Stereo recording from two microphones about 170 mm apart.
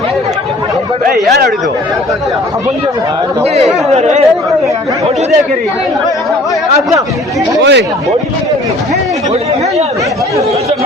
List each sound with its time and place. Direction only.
1.3 s speech: 75° right (ahead or behind)
3.4 s speech: 40° right (ahead or behind)
7.6 s speech: 90° right